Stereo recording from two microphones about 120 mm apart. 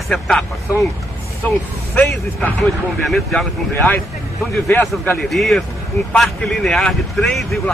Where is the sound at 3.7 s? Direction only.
15° left (ahead or behind).